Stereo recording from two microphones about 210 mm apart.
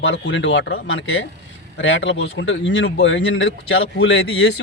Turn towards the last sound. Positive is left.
turn(degrees=55)  # may be behind; listen again after turning